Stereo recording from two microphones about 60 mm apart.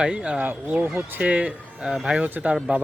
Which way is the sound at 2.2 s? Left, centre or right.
Right.